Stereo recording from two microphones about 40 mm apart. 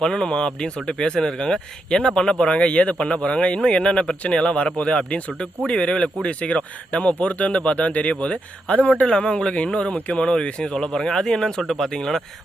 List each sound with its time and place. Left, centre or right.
0.0 s speech: centre; by 9.0 s left
9.0 s speech: left